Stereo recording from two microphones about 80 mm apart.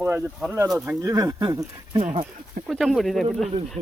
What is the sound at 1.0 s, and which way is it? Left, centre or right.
Speech, right.